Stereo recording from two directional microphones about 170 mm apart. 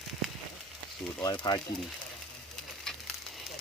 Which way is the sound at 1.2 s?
25° left (ahead or behind).